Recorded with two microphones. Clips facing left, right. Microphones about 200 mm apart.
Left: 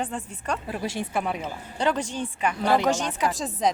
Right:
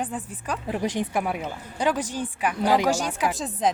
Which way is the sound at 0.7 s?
15° right (ahead or behind).